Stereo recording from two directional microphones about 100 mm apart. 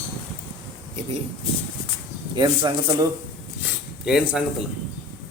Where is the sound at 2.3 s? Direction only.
50° right (ahead or behind).